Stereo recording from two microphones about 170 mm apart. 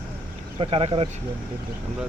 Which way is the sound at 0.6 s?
35° right (ahead or behind).